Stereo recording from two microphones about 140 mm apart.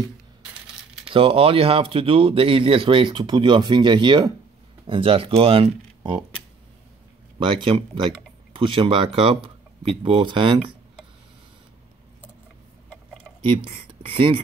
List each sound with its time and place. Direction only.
1.0 s speech: 40° right (ahead or behind)
7.3 s speech: 35° right (ahead or behind)
13.4 s speech: 40° right (ahead or behind)